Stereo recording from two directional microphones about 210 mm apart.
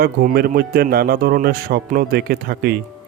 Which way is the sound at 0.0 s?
45° right (ahead or behind).